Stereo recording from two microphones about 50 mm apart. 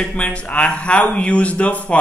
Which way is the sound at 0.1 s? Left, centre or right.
Left.